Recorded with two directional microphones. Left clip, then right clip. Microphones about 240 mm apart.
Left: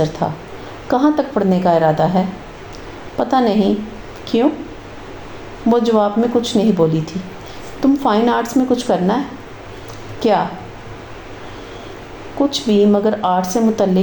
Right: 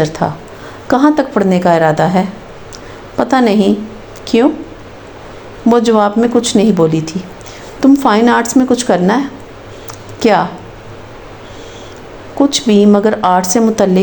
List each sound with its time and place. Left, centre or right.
0.2 s a woman's voice: right
5.6 s a woman's voice: right
12.4 s a woman's voice: right